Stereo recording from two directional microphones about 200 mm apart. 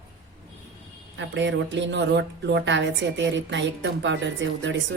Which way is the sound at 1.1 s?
65° right (ahead or behind).